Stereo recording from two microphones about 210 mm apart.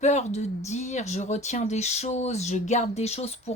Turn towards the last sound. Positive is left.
turn(degrees=30)  # may be behind; listen again after turning